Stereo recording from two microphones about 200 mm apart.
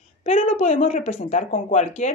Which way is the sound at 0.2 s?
35° left (ahead or behind).